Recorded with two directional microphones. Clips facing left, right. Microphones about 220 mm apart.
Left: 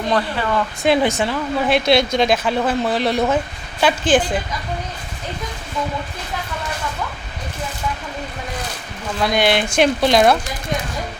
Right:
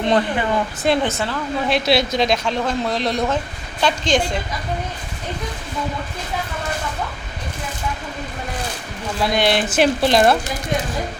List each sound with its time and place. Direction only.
0.0 s speech: 20° right (ahead or behind)
1.0 s a woman's voice: 15° left (ahead or behind)
1.7 s a woman's voice: centre (ahead or behind)
9.2 s speech: centre (ahead or behind)